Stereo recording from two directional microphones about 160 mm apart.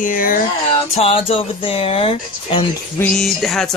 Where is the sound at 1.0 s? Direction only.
35° left (ahead or behind).